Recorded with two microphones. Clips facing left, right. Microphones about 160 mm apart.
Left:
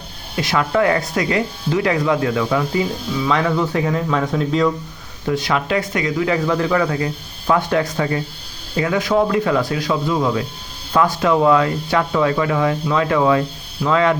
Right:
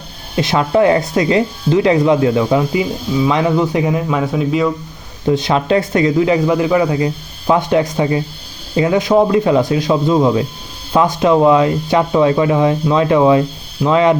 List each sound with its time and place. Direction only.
0.3 s speech: 25° right (ahead or behind); by 4.7 s 5° right (ahead or behind)
5.2 s speech: 25° right (ahead or behind)